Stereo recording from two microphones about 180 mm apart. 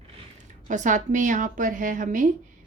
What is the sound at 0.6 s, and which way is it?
A woman's voice, 45° right (ahead or behind).